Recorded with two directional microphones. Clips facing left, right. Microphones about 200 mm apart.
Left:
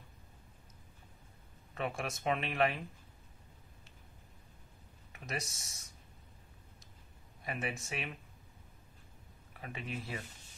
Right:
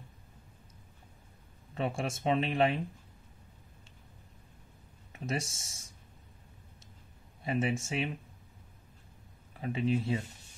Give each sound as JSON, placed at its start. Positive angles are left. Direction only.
{"t": 1.8, "sound": "speech", "side_deg": -30}
{"t": 5.1, "sound": "speech", "side_deg": -30}
{"t": 7.4, "sound": "speech", "side_deg": -30}
{"t": 9.6, "sound": "speech", "side_deg": -30}